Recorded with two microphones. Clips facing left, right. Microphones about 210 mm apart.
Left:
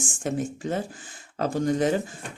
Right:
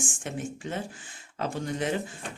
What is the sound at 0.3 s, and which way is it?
Speech, 40° left (ahead or behind).